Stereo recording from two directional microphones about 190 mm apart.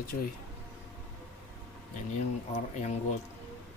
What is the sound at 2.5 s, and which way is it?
Speech, 35° left (ahead or behind).